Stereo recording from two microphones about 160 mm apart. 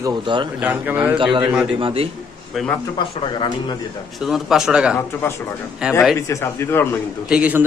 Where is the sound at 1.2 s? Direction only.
30° right (ahead or behind).